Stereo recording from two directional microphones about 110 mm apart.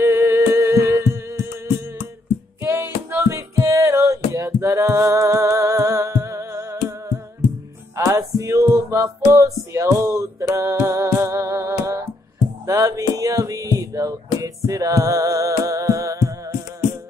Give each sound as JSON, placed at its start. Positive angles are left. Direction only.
{"t": 0.0, "sound": "humming", "side_deg": -25}
{"t": 2.6, "sound": "music", "side_deg": -20}